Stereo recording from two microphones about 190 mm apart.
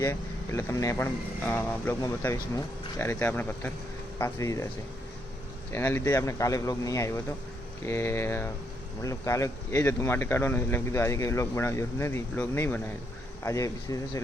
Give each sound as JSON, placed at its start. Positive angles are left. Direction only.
{"t": 0.0, "sound": "speech", "side_deg": 15}
{"t": 5.7, "sound": "speech", "side_deg": 10}